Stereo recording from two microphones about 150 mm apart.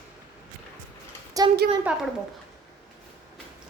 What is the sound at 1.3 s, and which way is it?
Speech, 25° right (ahead or behind).